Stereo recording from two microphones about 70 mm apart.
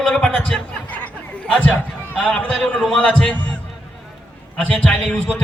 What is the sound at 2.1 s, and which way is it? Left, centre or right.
A man's voice, centre.